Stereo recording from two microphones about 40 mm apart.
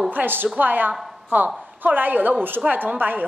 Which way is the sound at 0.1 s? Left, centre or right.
Right.